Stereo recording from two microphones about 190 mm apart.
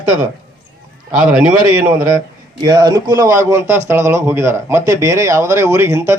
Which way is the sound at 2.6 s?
20° right (ahead or behind).